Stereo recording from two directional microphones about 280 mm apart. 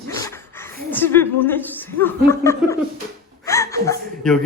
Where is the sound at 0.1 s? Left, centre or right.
Centre.